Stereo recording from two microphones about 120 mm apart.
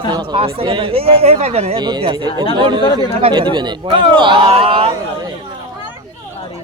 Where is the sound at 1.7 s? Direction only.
35° right (ahead or behind); by 4.9 s 55° right (ahead or behind).